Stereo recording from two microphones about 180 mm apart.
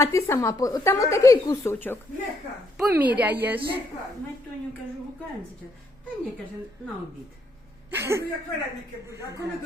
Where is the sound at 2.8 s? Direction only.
10° right (ahead or behind).